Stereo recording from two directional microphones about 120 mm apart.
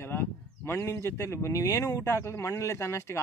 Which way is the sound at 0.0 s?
20° left (ahead or behind).